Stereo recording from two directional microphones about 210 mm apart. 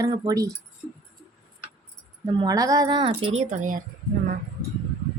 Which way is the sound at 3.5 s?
40° right (ahead or behind).